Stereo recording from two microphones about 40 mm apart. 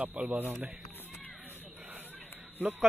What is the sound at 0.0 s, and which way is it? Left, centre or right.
Speech, right.